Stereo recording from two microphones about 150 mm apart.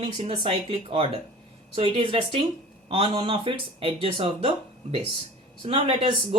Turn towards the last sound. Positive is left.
turn(degrees=-35)  # may be behind; listen again after turning